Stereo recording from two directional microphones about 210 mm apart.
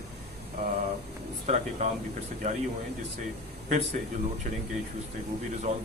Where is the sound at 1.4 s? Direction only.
30° right (ahead or behind).